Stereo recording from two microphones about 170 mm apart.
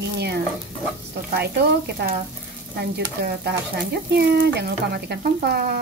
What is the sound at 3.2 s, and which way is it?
Speech, 70° right (ahead or behind).